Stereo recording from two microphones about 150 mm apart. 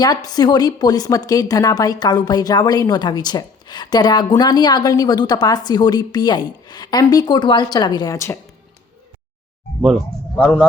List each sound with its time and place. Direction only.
0.0 s a woman's voice: 25° left (ahead or behind)